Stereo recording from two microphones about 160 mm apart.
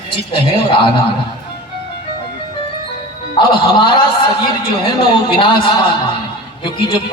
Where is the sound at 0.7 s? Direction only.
30° left (ahead or behind).